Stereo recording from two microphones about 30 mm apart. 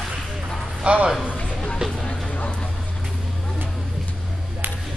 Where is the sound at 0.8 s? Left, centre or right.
Right.